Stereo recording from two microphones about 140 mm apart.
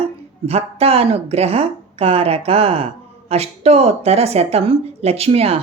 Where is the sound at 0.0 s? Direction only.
45° right (ahead or behind).